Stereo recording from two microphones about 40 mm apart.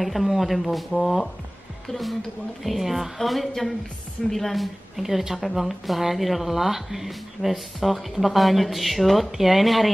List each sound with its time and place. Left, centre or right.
0.0 s speech: centre
4.9 s speech: centre